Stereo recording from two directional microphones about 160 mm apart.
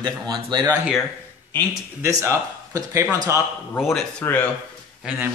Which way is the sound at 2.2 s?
20° right (ahead or behind).